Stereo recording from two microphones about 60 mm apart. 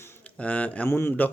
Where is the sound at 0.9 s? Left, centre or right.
Left.